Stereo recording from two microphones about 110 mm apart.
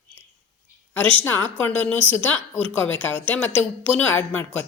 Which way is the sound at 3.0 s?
15° left (ahead or behind).